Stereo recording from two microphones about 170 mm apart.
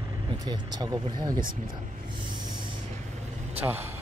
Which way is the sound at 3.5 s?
10° right (ahead or behind).